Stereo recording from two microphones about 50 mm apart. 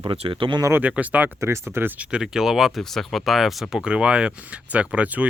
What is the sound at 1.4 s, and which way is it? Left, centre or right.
Speech, right.